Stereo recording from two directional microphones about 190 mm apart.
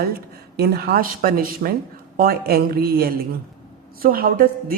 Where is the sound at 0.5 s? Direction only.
55° right (ahead or behind).